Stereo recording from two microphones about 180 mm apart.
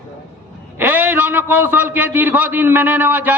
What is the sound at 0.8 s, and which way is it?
A man's voice, 10° right (ahead or behind).